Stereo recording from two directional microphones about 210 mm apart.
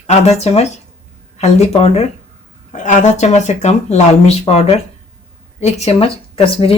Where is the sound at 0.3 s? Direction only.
30° left (ahead or behind).